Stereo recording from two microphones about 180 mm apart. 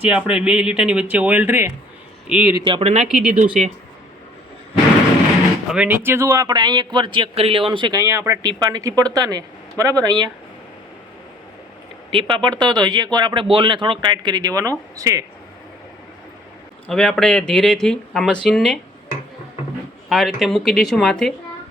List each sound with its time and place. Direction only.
0.1 s speech: 5° right (ahead or behind)
2.6 s speech: 35° right (ahead or behind)
3.2 s speech: 5° right (ahead or behind)
5.7 s speech: 10° right (ahead or behind)
12.1 s speech: 25° right (ahead or behind)
16.9 s speech: centre (ahead or behind)
20.1 s speech: centre (ahead or behind)